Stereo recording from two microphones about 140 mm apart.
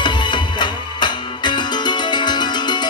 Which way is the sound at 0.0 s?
35° left (ahead or behind).